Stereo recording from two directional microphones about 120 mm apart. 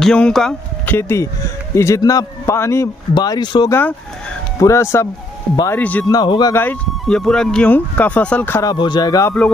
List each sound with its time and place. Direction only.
0.0 s speech: 5° left (ahead or behind)
0.8 s a man's voice: 20° left (ahead or behind)
3.2 s a man's voice: 35° left (ahead or behind)
5.7 s speech: 15° left (ahead or behind)
6.0 s speech: 35° left (ahead or behind)
6.5 s speech: 15° left (ahead or behind)
7.1 s speech: 5° left (ahead or behind)
8.6 s speech: 40° left (ahead or behind)